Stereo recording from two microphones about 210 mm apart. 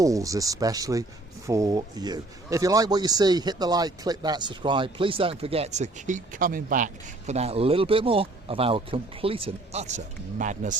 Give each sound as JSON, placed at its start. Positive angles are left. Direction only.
{"t": 0.0, "sound": "speech", "side_deg": -15}